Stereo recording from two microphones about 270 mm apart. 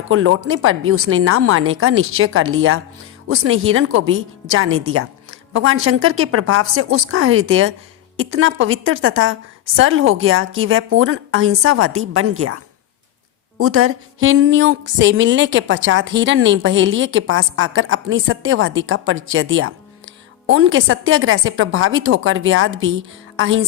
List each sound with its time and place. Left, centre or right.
0.1 s a woman's voice: right
13.6 s a woman's voice: right